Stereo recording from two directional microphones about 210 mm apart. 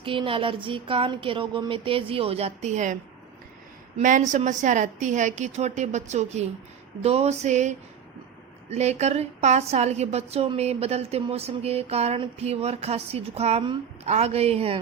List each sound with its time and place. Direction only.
0.0 s a woman's voice: 25° right (ahead or behind)
8.7 s a woman's voice: 30° right (ahead or behind)